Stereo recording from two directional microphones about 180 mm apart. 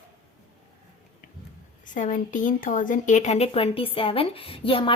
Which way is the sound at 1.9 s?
45° left (ahead or behind).